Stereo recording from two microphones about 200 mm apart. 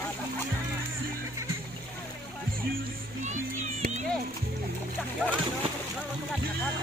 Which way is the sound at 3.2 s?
35° right (ahead or behind).